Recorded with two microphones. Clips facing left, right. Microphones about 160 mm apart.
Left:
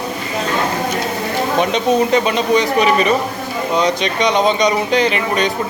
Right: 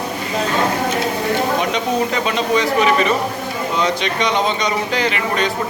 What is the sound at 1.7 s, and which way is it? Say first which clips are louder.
Speech: left 5 dB; 20° left (ahead or behind).